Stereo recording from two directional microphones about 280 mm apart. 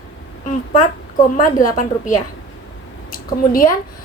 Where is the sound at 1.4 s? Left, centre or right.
Left.